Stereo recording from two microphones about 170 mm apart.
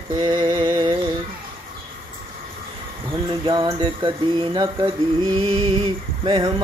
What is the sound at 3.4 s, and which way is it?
Mantra, 25° right (ahead or behind).